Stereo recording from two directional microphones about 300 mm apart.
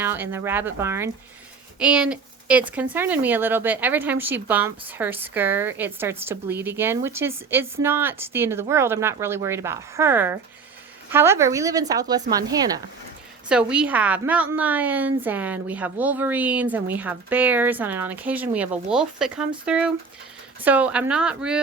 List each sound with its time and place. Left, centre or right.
0.0 s a woman's voice: centre